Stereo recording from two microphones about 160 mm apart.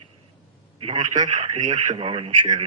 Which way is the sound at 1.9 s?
35° right (ahead or behind).